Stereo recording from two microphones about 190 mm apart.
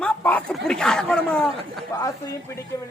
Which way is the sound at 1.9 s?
20° left (ahead or behind).